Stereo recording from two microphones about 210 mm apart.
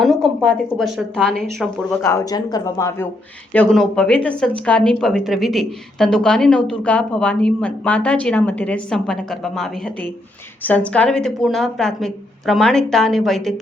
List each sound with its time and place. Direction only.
0.0 s speech: centre (ahead or behind)
2.0 s speech: 15° left (ahead or behind)
3.5 s speech: 5° left (ahead or behind)